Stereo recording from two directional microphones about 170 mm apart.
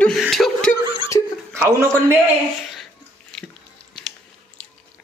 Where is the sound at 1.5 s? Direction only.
15° right (ahead or behind).